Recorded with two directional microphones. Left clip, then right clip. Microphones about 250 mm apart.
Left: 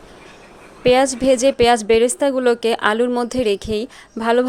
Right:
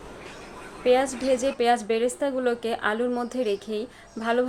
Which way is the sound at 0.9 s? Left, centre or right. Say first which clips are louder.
Left 7 dB; left.